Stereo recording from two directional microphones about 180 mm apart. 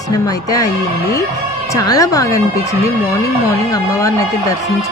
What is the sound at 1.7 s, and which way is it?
Speech, 20° left (ahead or behind).